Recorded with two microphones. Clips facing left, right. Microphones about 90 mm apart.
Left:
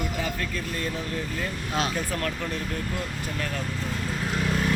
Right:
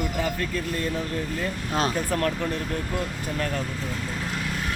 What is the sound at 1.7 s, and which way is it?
Speech, 35° right (ahead or behind).